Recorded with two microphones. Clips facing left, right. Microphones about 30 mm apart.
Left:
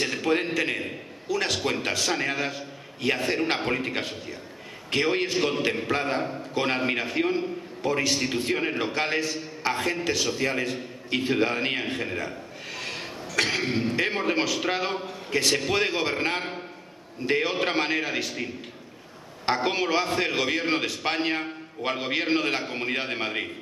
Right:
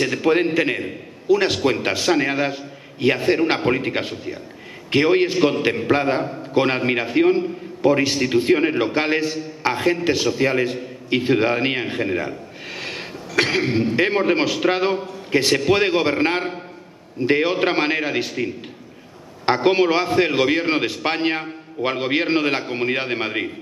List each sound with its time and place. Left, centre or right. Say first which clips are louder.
0.0 s a man's voice: right 7 dB; right